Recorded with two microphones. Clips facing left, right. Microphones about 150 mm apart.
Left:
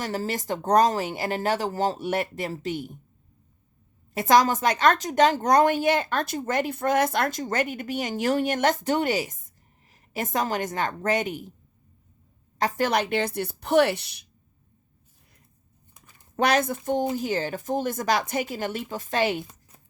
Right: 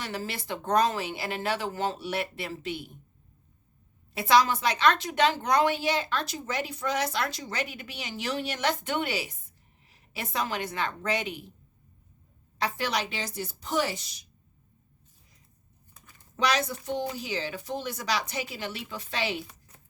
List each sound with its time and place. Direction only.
0.0 s speech: 40° left (ahead or behind)
4.1 s a woman's voice: 45° left (ahead or behind)
12.5 s a woman's voice: 45° left (ahead or behind); by 14.3 s 65° left (ahead or behind)
16.3 s a woman's voice: 55° left (ahead or behind)